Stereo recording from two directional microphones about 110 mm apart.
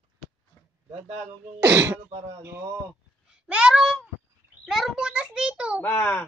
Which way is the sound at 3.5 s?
10° right (ahead or behind).